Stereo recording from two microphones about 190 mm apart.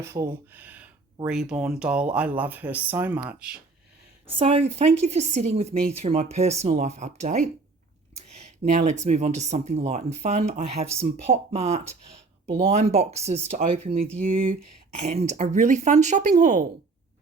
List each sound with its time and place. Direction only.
0.0 s speech: 15° right (ahead or behind)
4.3 s speech: 30° right (ahead or behind)